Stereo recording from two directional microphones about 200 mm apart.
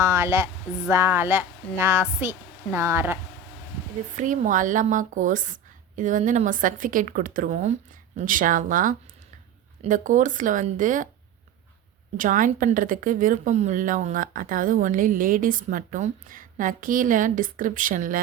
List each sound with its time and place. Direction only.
0.0 s speech: 15° right (ahead or behind)
4.2 s a woman's voice: 40° right (ahead or behind)
12.1 s a woman's voice: 40° right (ahead or behind)